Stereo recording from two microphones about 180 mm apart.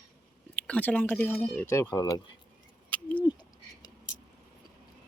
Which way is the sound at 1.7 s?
20° left (ahead or behind).